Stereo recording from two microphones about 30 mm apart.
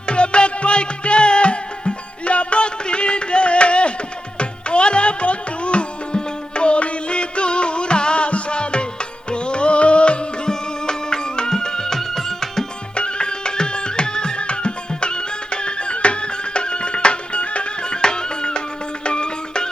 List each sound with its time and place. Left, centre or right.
0.0 s music: left; by 12.6 s centre
12.9 s music: left
17.8 s music: left